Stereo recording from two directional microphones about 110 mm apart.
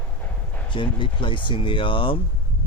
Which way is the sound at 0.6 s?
50° left (ahead or behind).